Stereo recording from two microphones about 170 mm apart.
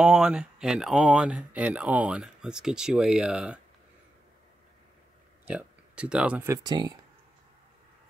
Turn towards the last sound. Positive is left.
turn(degrees=-25)  # may be behind; listen again after turning